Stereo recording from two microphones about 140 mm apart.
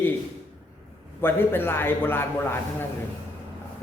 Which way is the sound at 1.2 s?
15° left (ahead or behind).